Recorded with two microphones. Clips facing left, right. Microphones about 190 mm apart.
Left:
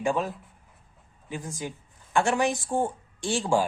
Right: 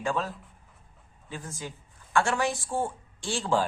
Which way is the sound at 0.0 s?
15° left (ahead or behind).